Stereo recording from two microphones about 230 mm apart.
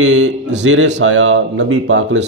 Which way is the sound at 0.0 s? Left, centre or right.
Right.